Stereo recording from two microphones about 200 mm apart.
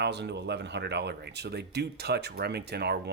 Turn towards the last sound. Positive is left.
turn(degrees=-55)  # may be behind; listen again after turning